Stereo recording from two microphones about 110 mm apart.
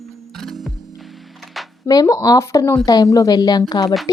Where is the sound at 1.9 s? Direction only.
30° left (ahead or behind).